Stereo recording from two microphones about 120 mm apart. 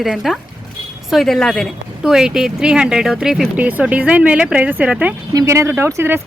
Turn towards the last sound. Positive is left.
turn(degrees=-20)  # may be behind; listen again after turning